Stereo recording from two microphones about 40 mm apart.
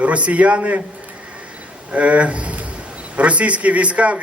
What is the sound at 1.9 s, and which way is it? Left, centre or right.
A man's voice, right.